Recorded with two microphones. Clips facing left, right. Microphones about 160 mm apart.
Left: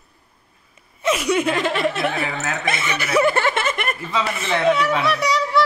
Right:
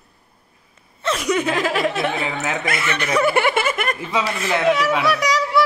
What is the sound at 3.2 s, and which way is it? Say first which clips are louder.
Snicker: right 1 dB; 10° right (ahead or behind).